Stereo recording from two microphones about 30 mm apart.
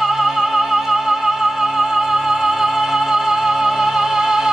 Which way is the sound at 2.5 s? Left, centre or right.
Centre.